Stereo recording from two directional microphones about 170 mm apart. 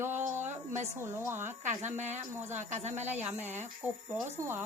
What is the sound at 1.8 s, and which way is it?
Speech, 45° right (ahead or behind).